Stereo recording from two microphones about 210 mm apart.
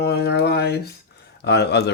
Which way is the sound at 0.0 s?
50° left (ahead or behind).